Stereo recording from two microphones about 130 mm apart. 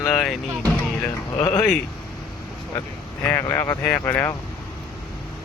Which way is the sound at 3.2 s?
20° left (ahead or behind).